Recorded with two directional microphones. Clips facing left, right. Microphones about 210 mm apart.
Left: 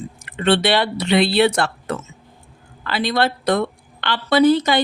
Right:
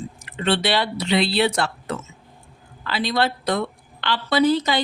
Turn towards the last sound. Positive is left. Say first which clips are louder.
# left 4 dB
turn(degrees=55)  # may be behind; listen again after turning